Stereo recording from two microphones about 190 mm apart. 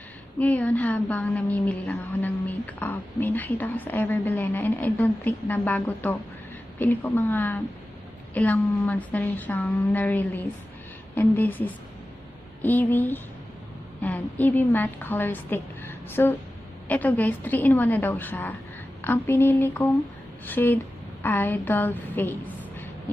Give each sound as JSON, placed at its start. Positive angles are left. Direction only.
{"t": 0.4, "sound": "a woman's voice", "side_deg": 10}